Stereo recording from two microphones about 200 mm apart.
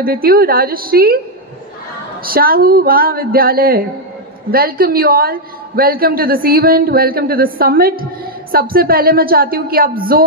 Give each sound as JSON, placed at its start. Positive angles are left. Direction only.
{"t": 0.0, "sound": "a woman's voice", "side_deg": -50}
{"t": 2.2, "sound": "a woman's voice", "side_deg": -45}